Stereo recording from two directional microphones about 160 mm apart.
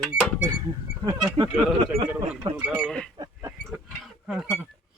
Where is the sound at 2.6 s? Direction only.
Centre (ahead or behind).